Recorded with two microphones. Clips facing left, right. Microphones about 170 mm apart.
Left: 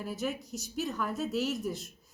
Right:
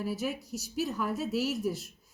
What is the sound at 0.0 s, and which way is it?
A woman's voice, 5° right (ahead or behind).